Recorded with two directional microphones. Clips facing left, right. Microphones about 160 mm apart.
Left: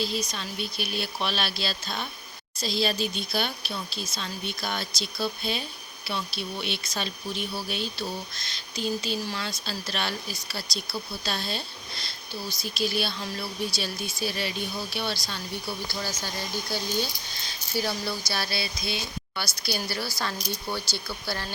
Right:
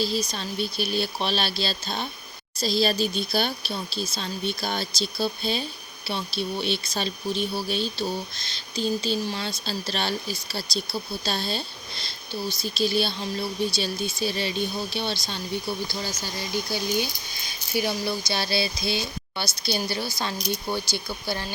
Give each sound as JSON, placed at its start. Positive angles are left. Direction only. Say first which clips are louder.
{"t": 0.0, "sound": "speech", "louder": "right 3 dB", "side_deg": -35}
{"t": 15.9, "sound": "speech", "louder": "right 1 dB", "side_deg": -15}
{"t": 18.3, "sound": "speech", "louder": "right 5 dB", "side_deg": -25}